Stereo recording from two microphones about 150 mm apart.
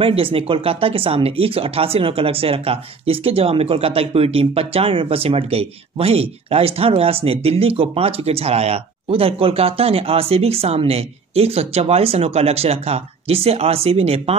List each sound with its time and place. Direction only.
0.0 s speech: 35° right (ahead or behind)